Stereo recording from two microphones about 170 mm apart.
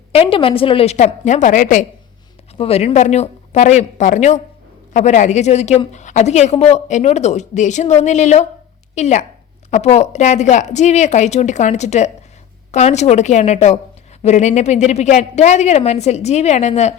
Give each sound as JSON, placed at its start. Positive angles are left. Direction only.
{"t": 0.1, "sound": "a woman's voice", "side_deg": 35}
{"t": 2.6, "sound": "a woman's voice", "side_deg": 35}